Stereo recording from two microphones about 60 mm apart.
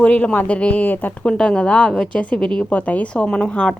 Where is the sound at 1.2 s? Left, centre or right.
Centre.